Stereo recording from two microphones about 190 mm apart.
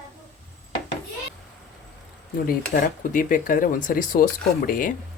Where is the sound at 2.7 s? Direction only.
45° left (ahead or behind).